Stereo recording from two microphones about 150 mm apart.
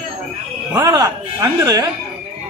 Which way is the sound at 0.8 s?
25° right (ahead or behind).